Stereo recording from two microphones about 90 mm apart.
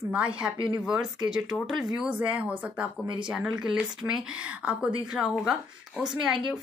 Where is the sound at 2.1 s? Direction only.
15° right (ahead or behind).